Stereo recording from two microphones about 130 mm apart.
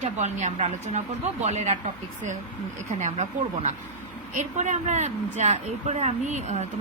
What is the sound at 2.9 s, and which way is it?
A woman's voice, 65° right (ahead or behind).